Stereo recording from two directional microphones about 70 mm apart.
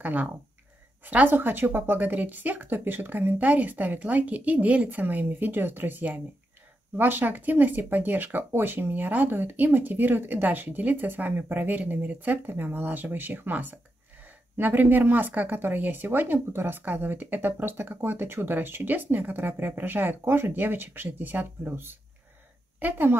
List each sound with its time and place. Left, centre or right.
0.0 s speech: right